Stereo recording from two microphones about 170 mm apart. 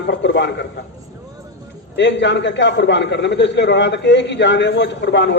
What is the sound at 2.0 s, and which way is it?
A man's voice, 90° left.